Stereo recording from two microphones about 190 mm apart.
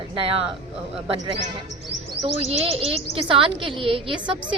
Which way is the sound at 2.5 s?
30° right (ahead or behind).